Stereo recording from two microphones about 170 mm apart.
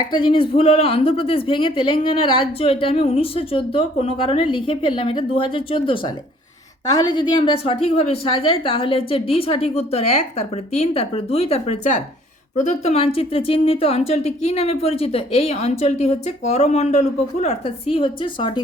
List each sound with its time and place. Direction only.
0.1 s a woman's voice: 30° left (ahead or behind)